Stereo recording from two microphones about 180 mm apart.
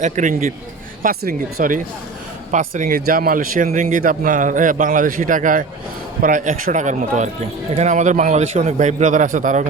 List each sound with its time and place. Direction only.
0.0 s a man's voice: 45° right (ahead or behind)